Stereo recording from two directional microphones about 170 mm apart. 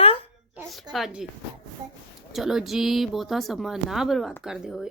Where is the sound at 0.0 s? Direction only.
35° left (ahead or behind).